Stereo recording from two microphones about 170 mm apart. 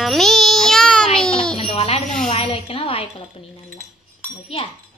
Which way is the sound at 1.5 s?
35° left (ahead or behind).